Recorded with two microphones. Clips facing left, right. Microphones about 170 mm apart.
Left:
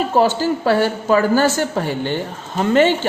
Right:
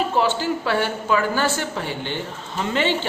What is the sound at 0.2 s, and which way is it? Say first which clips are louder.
A woman's voice: left 8 dB; 40° left (ahead or behind).